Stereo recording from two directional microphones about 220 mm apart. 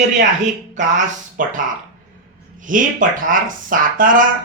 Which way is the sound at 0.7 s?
35° right (ahead or behind).